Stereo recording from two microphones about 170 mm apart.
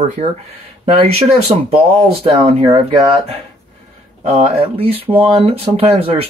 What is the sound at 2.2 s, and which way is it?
Speech, 35° right (ahead or behind).